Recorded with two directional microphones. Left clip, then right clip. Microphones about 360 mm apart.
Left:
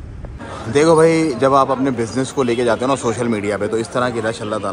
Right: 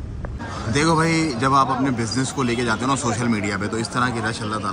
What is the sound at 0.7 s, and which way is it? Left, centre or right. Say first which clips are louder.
A man's voice: left 8 dB; centre.